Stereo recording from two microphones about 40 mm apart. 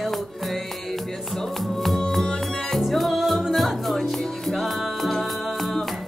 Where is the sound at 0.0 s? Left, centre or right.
Centre.